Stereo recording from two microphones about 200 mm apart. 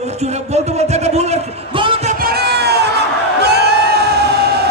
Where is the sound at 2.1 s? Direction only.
50° right (ahead or behind).